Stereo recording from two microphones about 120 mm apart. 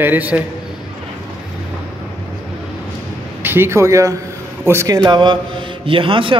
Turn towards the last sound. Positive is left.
turn(degrees=-45)  # may be behind; listen again after turning